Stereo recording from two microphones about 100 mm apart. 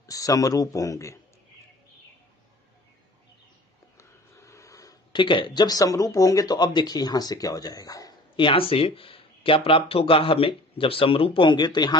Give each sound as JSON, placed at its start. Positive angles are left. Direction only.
{"t": 0.0, "sound": "a man's voice", "side_deg": 35}
{"t": 4.0, "sound": "a sound", "side_deg": 30}
{"t": 5.1, "sound": "speech", "side_deg": 55}
{"t": 8.4, "sound": "speech", "side_deg": 60}